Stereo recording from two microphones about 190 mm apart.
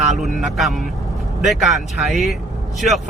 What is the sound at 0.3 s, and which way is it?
Speech, centre (ahead or behind).